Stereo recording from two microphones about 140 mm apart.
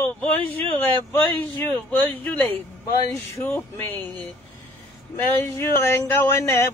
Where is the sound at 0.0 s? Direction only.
15° left (ahead or behind).